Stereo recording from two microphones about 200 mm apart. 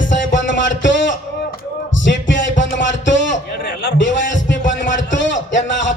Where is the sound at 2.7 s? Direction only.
65° left (ahead or behind).